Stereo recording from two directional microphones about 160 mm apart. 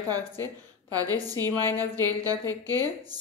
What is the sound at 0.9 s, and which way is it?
A woman's voice, 20° right (ahead or behind).